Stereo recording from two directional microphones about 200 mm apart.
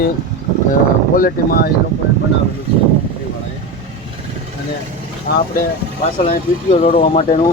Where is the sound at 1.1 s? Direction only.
45° left (ahead or behind).